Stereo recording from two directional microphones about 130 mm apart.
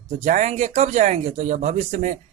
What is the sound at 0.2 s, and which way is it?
Speech, 65° right (ahead or behind).